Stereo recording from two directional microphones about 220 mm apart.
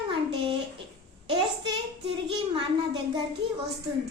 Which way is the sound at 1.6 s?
25° right (ahead or behind).